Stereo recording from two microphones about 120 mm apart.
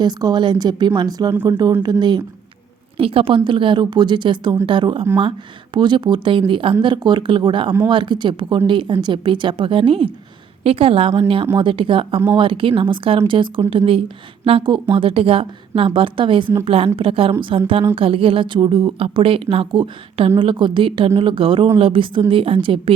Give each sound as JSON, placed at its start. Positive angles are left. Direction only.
{"t": 0.0, "sound": "a woman's voice", "side_deg": -35}
{"t": 3.0, "sound": "a woman's voice", "side_deg": -50}